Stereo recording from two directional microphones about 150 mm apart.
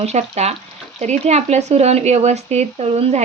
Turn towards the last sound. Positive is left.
turn(degrees=-45)  # may be behind; listen again after turning